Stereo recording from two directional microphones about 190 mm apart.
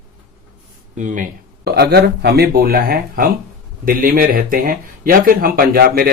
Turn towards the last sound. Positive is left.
turn(degrees=-50)  # may be behind; listen again after turning